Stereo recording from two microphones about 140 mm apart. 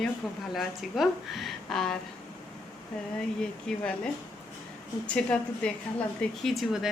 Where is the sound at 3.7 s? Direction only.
5° left (ahead or behind).